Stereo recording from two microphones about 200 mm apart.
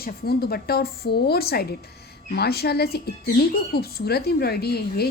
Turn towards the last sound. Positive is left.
turn(degrees=50)  # may be behind; listen again after turning